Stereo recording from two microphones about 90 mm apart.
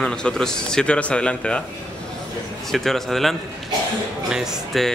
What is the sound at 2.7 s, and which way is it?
Speech, 5° left (ahead or behind).